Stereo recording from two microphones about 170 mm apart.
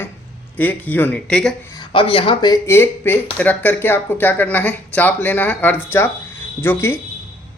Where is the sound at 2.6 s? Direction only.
15° left (ahead or behind).